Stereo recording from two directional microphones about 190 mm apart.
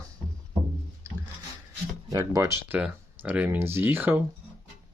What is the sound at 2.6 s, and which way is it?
Speech, 10° right (ahead or behind).